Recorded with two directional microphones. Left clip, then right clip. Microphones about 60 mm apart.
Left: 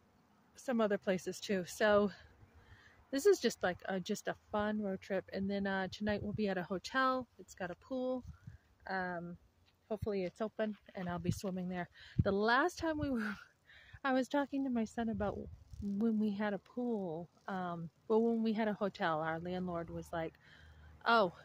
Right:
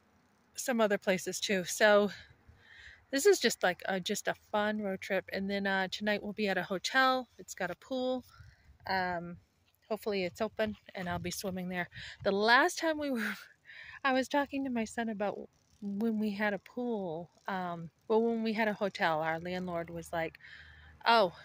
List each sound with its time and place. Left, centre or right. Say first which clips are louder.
0.6 s speech: right 5 dB; centre
10.0 s speech: right 4 dB; right
10.5 s speech: right 5 dB; right
11.5 s speech: right 5 dB; right
11.9 s speech: right 3 dB; centre
13.4 s speech: right 8 dB; centre
17.5 s speech: right 5 dB; centre
18.3 s speech: right 4 dB; centre